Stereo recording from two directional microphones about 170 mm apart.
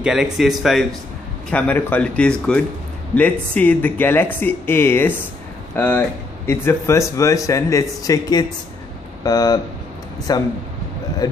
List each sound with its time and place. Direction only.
0.0 s speech: 5° right (ahead or behind)
1.5 s speech: 10° left (ahead or behind)